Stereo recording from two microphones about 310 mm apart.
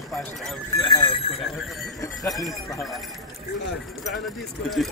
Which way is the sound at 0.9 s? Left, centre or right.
Centre.